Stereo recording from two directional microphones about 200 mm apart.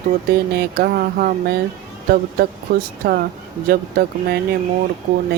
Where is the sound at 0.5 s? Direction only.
50° right (ahead or behind).